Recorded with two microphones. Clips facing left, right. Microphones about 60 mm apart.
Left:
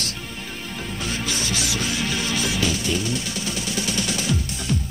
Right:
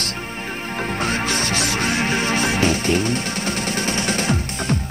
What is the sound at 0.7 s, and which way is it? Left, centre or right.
Music, right.